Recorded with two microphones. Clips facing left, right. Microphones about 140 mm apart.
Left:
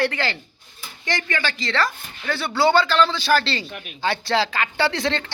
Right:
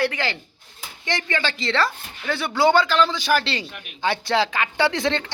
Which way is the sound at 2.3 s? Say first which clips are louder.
Even; 15° right (ahead or behind).